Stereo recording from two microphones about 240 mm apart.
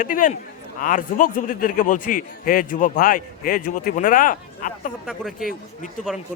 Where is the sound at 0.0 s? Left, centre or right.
Left.